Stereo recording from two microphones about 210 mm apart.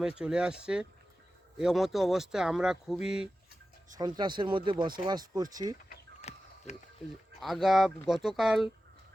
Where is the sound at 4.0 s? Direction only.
20° right (ahead or behind).